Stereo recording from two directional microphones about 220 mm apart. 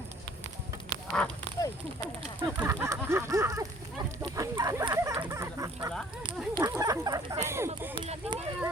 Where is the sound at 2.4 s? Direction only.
10° right (ahead or behind).